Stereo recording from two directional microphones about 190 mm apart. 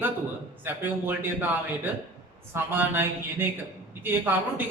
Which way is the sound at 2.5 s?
10° right (ahead or behind).